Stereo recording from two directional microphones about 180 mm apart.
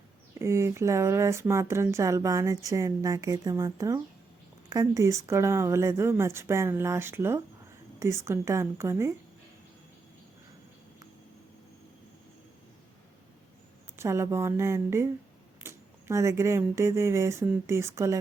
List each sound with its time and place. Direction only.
0.3 s a woman's voice: 15° right (ahead or behind)
14.0 s speech: 15° right (ahead or behind)